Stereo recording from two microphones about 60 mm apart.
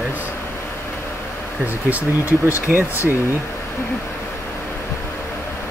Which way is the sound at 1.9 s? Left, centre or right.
Right.